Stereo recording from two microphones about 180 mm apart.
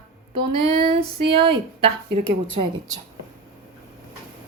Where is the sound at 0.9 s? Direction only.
30° right (ahead or behind).